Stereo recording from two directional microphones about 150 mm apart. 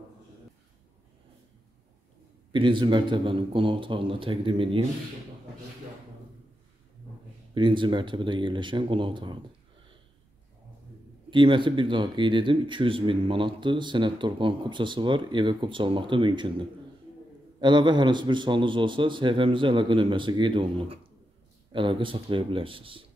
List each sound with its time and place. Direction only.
2.5 s speech: 30° right (ahead or behind)
7.5 s speech: 35° right (ahead or behind)
11.2 s speech: 35° right (ahead or behind)